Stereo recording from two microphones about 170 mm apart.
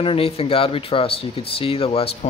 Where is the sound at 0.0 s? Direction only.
35° left (ahead or behind).